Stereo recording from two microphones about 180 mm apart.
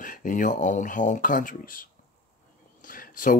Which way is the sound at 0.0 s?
50° left (ahead or behind).